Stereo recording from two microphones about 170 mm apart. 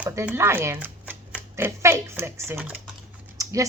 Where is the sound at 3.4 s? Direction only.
20° right (ahead or behind).